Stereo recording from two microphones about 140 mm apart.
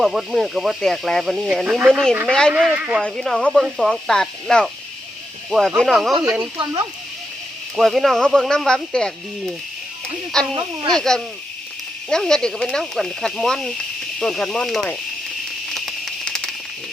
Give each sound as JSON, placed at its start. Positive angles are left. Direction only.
{"t": 0.0, "sound": "speech", "side_deg": 0}
{"t": 2.5, "sound": "speech", "side_deg": -10}
{"t": 3.0, "sound": "speech", "side_deg": 5}
{"t": 7.8, "sound": "speech", "side_deg": 0}
{"t": 15.7, "sound": "a sound", "side_deg": 0}